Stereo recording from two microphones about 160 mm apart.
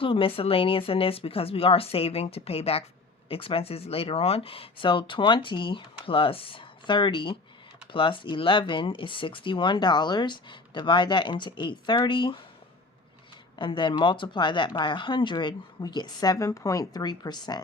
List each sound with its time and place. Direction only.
0.0 s speech: 35° left (ahead or behind)
13.6 s speech: 30° left (ahead or behind)